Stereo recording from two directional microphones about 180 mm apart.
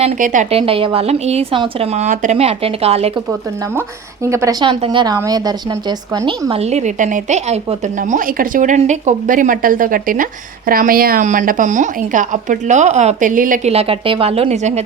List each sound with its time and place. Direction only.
0.0 s a woman's voice: 40° right (ahead or behind)
3.8 s speech: 15° right (ahead or behind)
4.6 s a woman's voice: 25° right (ahead or behind); by 13.6 s 50° right (ahead or behind)
13.7 s a woman's voice: 30° right (ahead or behind)